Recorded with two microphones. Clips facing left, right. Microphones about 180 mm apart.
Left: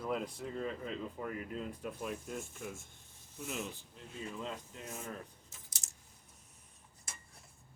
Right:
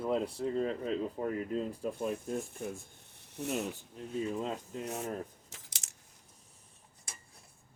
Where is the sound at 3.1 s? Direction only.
70° right (ahead or behind).